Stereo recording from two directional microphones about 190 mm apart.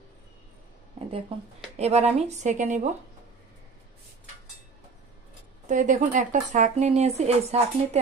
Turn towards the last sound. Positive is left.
turn(degrees=-35)  # may be behind; listen again after turning